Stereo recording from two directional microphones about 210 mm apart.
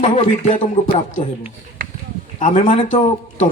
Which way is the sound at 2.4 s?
35° left (ahead or behind).